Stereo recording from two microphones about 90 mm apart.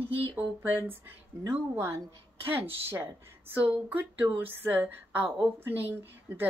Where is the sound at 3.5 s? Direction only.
15° right (ahead or behind).